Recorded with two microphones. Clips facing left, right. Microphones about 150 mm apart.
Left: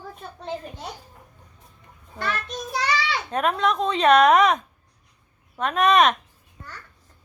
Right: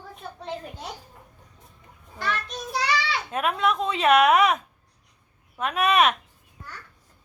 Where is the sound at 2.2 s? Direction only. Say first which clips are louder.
Left 1 dB; centre (ahead or behind).